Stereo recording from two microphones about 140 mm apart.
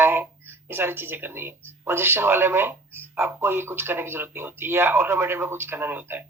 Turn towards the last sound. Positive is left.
turn(degrees=-15)  # may be behind; listen again after turning